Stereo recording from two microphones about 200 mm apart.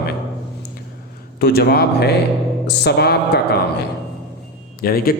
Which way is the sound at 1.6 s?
50° left (ahead or behind).